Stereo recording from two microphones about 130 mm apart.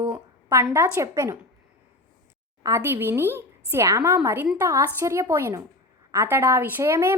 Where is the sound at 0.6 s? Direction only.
15° right (ahead or behind).